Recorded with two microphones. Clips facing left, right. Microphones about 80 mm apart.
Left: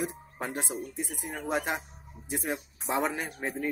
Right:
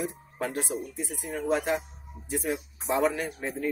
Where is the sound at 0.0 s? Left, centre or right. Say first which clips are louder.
Right 2 dB; centre.